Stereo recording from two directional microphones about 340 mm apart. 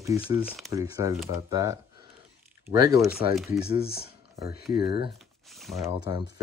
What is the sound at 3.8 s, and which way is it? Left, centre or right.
Speech, left.